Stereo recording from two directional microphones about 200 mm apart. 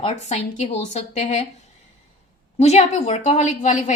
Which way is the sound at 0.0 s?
35° left (ahead or behind).